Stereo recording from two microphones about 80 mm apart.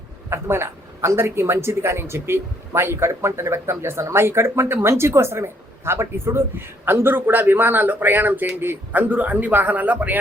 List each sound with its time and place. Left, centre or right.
0.3 s speech: right